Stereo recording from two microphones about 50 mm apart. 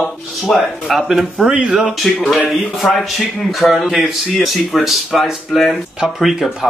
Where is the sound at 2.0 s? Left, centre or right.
Centre.